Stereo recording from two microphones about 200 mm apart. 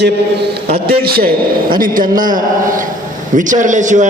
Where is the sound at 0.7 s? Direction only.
50° right (ahead or behind).